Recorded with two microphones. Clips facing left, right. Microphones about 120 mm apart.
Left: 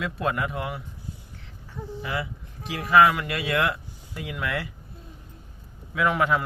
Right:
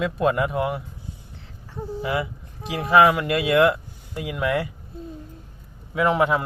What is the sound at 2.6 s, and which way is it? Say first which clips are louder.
A man's voice: right 2 dB; 25° right (ahead or behind).